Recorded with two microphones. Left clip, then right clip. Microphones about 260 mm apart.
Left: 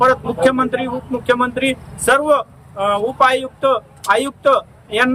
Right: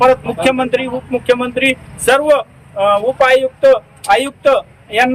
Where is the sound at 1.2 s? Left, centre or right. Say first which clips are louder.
Right 2 dB; centre.